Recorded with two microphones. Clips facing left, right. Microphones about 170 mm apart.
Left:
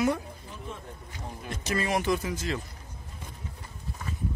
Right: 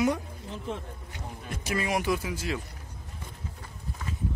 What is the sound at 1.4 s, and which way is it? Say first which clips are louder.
Speech: left 1 dB; 10° right (ahead or behind).